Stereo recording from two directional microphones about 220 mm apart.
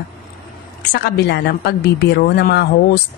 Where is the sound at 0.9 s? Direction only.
50° left (ahead or behind).